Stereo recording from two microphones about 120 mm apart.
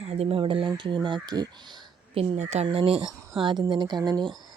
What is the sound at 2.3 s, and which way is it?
Speech, 70° right (ahead or behind).